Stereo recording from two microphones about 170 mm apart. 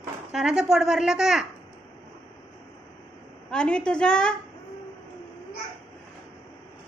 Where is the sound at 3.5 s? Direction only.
5° left (ahead or behind).